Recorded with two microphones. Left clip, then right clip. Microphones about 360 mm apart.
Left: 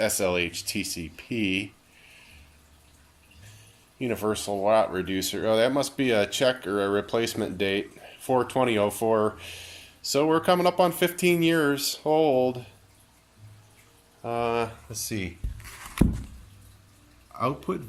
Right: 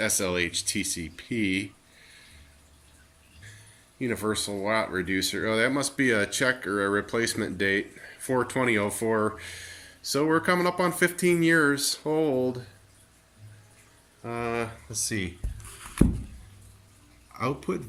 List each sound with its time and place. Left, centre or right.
0.3 s speech: left
4.1 s speech: centre
14.3 s speech: centre
17.3 s speech: centre